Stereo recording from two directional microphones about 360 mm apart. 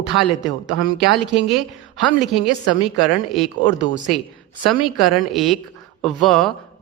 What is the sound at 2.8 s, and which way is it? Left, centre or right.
Speech, centre.